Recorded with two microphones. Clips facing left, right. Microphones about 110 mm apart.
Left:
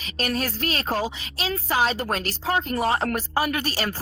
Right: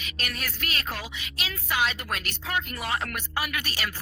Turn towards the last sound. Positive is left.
turn(degrees=35)  # may be behind; listen again after turning